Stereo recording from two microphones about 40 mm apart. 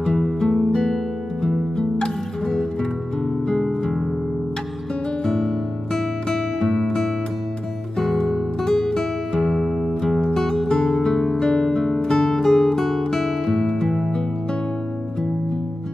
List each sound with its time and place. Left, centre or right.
0.0 s music: centre
0.7 s music: left
5.2 s music: centre
10.2 s music: centre